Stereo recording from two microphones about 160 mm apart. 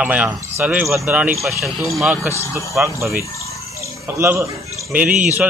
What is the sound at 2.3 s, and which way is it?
Speech, 15° right (ahead or behind).